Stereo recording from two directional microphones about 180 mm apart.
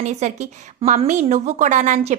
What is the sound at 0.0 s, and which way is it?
Speech, 40° right (ahead or behind).